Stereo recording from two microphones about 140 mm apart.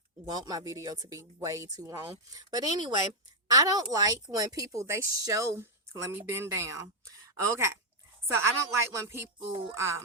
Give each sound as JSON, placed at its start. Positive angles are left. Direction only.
{"t": 0.3, "sound": "speech", "side_deg": -30}